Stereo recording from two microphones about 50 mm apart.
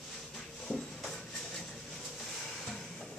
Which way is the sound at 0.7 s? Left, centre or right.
Left.